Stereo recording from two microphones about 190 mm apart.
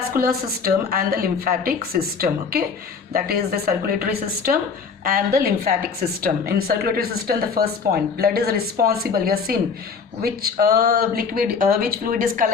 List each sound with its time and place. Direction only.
0.3 s speech: 55° right (ahead or behind)